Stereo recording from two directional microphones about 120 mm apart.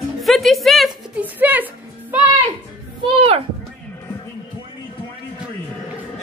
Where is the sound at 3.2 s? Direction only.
60° right (ahead or behind).